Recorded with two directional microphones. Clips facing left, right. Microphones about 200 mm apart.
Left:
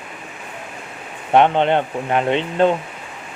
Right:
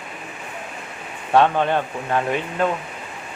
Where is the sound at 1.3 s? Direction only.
20° left (ahead or behind).